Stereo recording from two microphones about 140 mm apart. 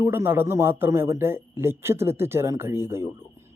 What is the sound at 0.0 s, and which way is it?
A man's voice, 15° right (ahead or behind).